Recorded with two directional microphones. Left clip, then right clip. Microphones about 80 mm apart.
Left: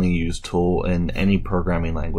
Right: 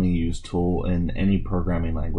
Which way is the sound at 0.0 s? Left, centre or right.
Left.